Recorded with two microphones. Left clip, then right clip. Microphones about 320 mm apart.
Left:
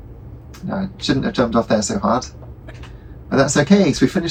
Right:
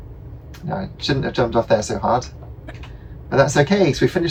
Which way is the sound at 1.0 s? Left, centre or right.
Right.